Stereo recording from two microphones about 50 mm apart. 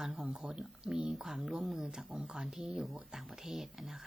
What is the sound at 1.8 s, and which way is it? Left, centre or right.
A woman's voice, centre.